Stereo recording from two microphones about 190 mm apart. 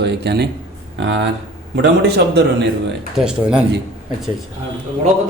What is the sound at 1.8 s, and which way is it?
Speech, 60° right (ahead or behind).